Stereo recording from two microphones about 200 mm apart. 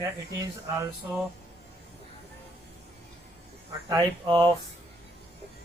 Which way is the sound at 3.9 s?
20° right (ahead or behind).